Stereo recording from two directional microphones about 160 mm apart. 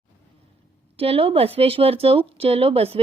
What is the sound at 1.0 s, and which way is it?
Speech, 35° right (ahead or behind).